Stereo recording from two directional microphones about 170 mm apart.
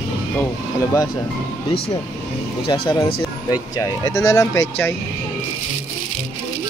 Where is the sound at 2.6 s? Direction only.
30° left (ahead or behind).